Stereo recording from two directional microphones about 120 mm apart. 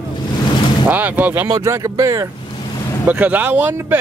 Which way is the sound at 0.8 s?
15° right (ahead or behind).